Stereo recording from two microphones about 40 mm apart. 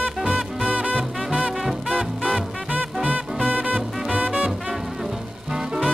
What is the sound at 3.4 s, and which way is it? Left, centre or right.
Music, right.